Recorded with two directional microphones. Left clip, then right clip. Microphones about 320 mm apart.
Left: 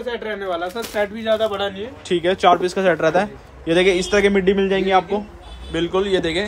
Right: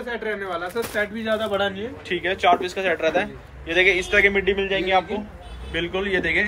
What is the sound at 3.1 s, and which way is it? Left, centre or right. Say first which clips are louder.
Speech: left 4 dB; left.